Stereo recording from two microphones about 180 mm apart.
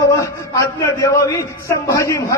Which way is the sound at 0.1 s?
15° left (ahead or behind).